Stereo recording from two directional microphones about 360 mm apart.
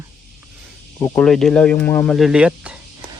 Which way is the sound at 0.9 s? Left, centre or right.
Centre.